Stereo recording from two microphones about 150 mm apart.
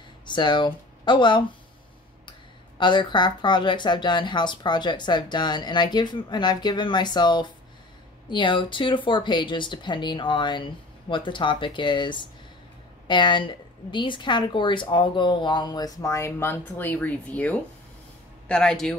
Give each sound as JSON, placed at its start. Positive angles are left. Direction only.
{"t": 0.3, "sound": "speech", "side_deg": 30}
{"t": 2.8, "sound": "a woman's voice", "side_deg": 30}